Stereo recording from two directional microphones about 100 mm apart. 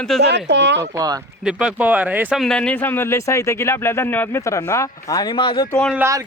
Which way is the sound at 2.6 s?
15° left (ahead or behind).